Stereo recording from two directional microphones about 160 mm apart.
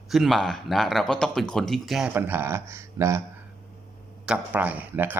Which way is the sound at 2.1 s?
15° right (ahead or behind).